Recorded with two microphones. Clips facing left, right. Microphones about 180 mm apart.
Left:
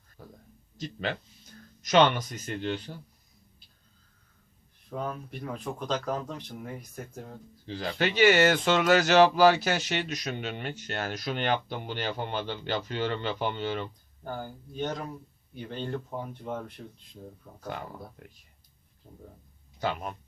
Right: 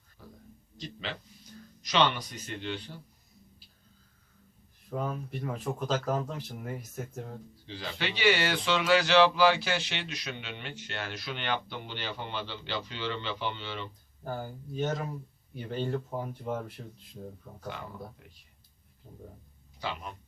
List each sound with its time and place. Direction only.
0.2 s a sound: 50° left (ahead or behind)
0.8 s speech: 45° left (ahead or behind)
4.9 s speech: 5° right (ahead or behind)
7.7 s speech: 45° left (ahead or behind)
14.3 s speech: 5° right (ahead or behind)
18.2 s speech: 50° left (ahead or behind)
19.1 s speech: 5° left (ahead or behind)
19.8 s speech: 50° left (ahead or behind)